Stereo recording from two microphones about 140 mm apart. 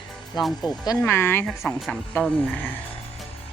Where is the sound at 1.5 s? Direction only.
5° left (ahead or behind).